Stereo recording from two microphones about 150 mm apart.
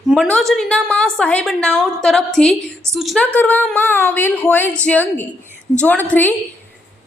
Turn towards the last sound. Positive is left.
turn(degrees=10)  # may be behind; listen again after turning